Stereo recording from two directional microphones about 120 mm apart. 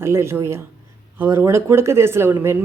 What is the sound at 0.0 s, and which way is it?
Speech, 20° right (ahead or behind).